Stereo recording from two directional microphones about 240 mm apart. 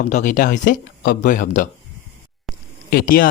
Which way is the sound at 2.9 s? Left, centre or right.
Left.